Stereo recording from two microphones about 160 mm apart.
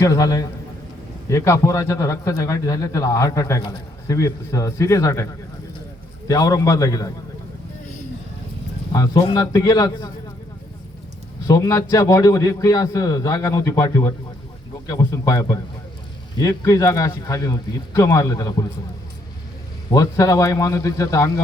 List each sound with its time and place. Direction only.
0.0 s a man's voice: 20° left (ahead or behind)
8.9 s a man's voice: 20° left (ahead or behind)
11.4 s a man's voice: 20° left (ahead or behind)
19.9 s a man's voice: 20° left (ahead or behind)